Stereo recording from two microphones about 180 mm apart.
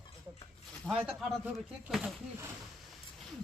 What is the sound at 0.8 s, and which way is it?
Speech, centre (ahead or behind).